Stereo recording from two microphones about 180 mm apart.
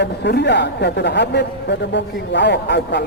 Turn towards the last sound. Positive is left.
turn(degrees=70)  # may be behind; listen again after turning